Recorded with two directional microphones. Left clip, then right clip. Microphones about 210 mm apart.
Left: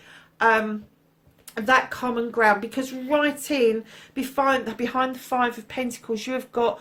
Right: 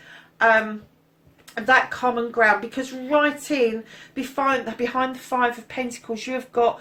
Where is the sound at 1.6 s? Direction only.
50° left (ahead or behind).